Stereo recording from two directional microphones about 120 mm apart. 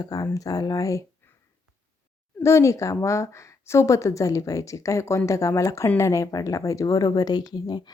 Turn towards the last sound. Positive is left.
turn(degrees=35)  # may be behind; listen again after turning